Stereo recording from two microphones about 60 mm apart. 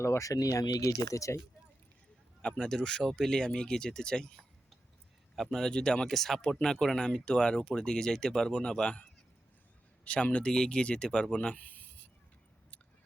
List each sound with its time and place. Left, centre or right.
0.0 s speech: left
2.4 s speech: centre
5.4 s speech: centre
10.0 s speech: left